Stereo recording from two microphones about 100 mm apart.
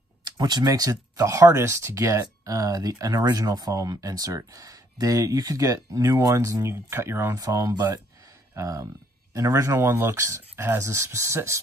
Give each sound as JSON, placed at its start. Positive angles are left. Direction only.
{"t": 0.2, "sound": "speech", "side_deg": -40}